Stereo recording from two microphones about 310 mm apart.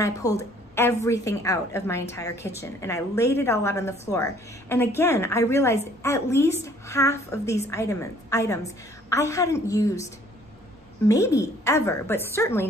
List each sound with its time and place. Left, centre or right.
0.0 s a woman's voice: centre
11.1 s a woman's voice: centre